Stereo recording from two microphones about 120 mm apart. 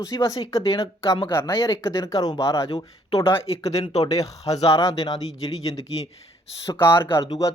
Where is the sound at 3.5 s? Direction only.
55° left (ahead or behind).